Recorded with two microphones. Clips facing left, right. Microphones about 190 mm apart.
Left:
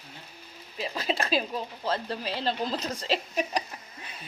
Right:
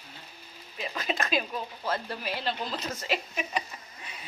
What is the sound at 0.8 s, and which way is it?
Speech, 30° left (ahead or behind).